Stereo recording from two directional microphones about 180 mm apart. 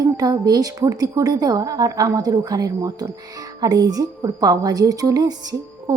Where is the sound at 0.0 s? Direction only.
20° right (ahead or behind).